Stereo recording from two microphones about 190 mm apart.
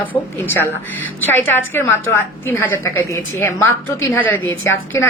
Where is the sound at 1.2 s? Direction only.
10° left (ahead or behind).